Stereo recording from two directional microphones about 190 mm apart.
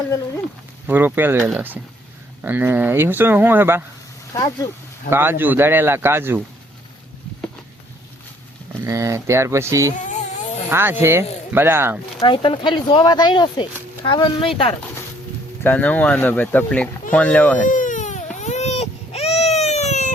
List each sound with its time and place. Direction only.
0.9 s speech: 10° right (ahead or behind)
5.1 s speech: 10° right (ahead or behind)
8.8 s speech: 15° right (ahead or behind)
10.0 s a sound: 40° left (ahead or behind)
10.7 s speech: 10° right (ahead or behind)
12.2 s speech: 25° left (ahead or behind)
15.6 s speech: 10° left (ahead or behind)
17.6 s baby cry: 45° left (ahead or behind)